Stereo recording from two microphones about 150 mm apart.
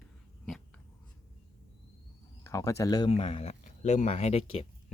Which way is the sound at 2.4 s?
20° left (ahead or behind).